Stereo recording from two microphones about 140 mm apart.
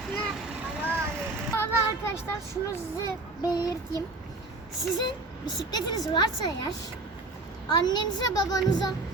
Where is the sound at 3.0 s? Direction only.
25° left (ahead or behind).